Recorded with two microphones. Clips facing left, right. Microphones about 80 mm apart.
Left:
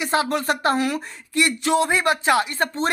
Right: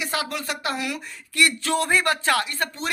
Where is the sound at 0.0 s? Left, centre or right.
Left.